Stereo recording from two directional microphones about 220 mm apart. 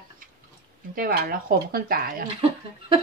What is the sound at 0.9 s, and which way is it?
Speech, 40° right (ahead or behind).